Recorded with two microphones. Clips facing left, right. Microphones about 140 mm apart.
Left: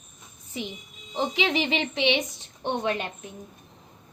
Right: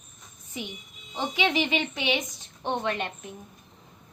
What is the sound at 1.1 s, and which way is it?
A woman's voice, 30° left (ahead or behind).